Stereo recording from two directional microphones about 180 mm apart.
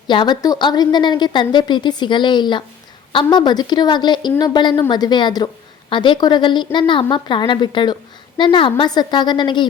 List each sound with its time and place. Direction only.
0.1 s a woman's voice: 25° left (ahead or behind)